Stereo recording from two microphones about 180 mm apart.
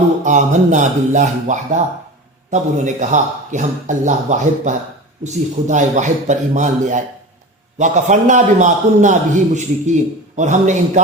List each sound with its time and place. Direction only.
0.3 s a man's voice: 45° right (ahead or behind)